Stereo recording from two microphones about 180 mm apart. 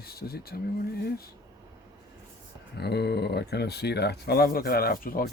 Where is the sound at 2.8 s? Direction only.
65° left (ahead or behind).